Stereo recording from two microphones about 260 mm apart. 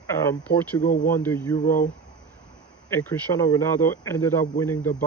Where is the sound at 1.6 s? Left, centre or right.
Left.